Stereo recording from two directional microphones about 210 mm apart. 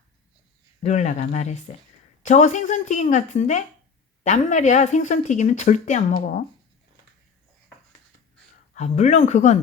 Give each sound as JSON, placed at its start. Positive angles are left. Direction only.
{"t": 0.8, "sound": "speech", "side_deg": 35}
{"t": 8.7, "sound": "speech", "side_deg": 35}